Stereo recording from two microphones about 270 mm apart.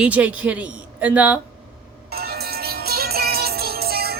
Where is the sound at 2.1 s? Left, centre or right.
Right.